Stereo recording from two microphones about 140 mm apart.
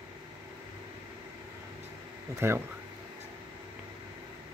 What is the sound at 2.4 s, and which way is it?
Speech, 15° right (ahead or behind).